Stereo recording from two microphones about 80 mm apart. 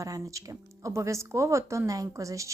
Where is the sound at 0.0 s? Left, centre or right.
Right.